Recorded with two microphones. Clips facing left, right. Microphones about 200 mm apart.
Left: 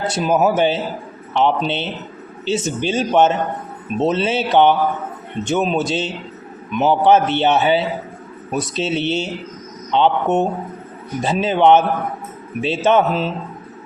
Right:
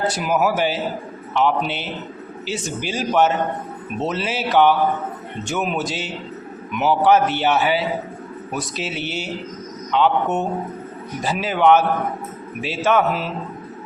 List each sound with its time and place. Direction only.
0.1 s a man's voice: 25° left (ahead or behind)